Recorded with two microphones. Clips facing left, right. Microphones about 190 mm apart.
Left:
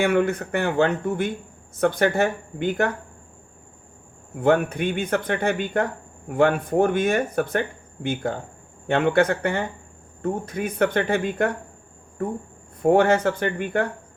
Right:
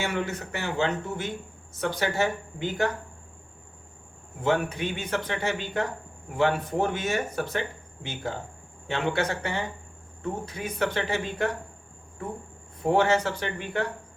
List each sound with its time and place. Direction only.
0.0 s speech: 55° left (ahead or behind)
4.4 s speech: 55° left (ahead or behind)